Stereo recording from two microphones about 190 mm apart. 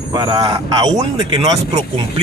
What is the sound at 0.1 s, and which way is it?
Speech, 25° right (ahead or behind).